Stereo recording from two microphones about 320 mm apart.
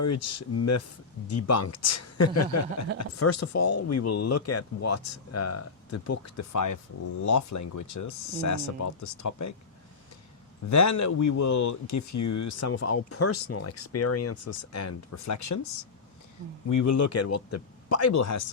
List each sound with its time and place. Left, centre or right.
0.0 s speech: left
10.7 s speech: left